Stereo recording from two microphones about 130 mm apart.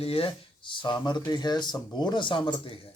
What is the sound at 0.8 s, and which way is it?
Speech, 35° left (ahead or behind).